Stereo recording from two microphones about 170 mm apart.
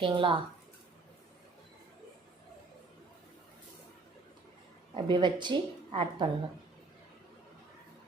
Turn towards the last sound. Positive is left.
turn(degrees=-30)  # may be behind; listen again after turning